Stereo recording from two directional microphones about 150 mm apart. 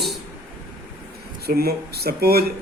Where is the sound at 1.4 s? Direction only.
90° right.